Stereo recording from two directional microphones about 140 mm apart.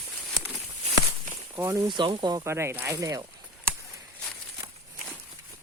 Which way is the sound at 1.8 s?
35° right (ahead or behind).